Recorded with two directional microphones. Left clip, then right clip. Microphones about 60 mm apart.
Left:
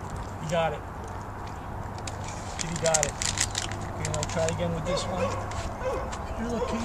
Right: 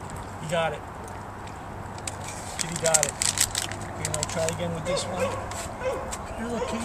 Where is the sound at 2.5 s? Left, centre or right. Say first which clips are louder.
Right 1 dB; centre.